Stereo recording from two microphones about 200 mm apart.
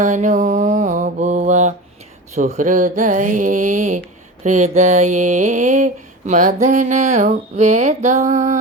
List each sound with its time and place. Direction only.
0.0 s mantra: 35° right (ahead or behind)